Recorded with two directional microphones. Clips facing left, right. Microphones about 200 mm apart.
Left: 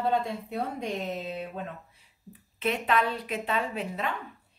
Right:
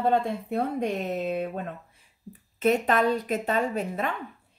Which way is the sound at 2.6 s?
45° right (ahead or behind).